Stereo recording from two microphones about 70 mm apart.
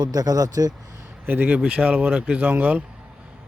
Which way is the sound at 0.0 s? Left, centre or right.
Right.